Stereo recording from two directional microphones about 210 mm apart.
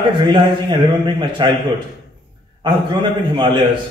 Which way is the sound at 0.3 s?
20° right (ahead or behind).